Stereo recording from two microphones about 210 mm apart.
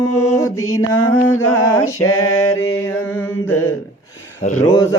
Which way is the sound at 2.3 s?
10° left (ahead or behind).